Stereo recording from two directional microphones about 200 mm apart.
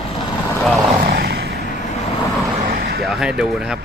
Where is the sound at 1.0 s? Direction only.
55° right (ahead or behind).